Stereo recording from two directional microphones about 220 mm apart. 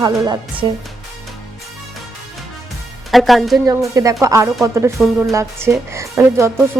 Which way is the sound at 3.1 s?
Centre (ahead or behind).